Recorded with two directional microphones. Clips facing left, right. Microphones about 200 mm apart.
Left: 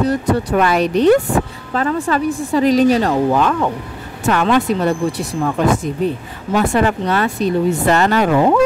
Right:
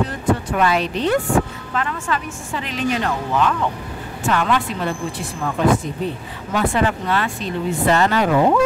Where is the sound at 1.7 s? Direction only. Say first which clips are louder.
Left 8 dB; 35° left (ahead or behind).